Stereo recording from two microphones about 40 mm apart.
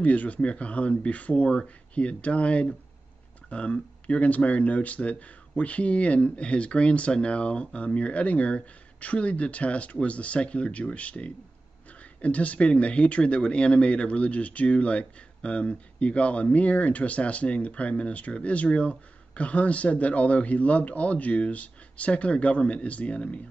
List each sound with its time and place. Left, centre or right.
0.0 s speech: left